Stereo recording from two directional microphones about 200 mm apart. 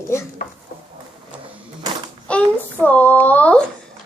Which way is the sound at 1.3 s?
5° right (ahead or behind).